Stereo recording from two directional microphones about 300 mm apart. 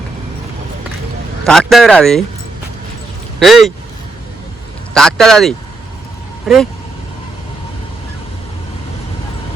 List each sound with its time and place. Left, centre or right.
1.5 s speech: centre
3.4 s speech: centre
4.9 s speech: centre